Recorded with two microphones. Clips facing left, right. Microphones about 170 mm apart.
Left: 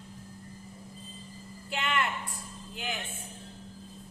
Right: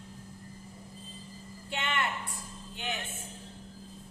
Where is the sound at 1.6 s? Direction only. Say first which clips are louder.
Left 2 dB; 25° right (ahead or behind).